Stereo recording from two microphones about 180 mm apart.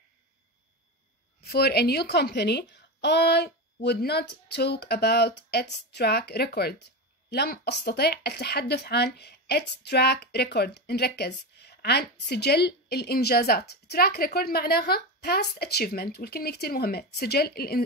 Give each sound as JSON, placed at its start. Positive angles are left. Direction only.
{"t": 1.4, "sound": "speech", "side_deg": 60}